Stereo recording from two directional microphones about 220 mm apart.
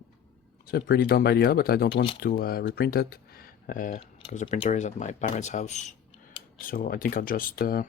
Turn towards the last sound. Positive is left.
turn(degrees=40)  # may be behind; listen again after turning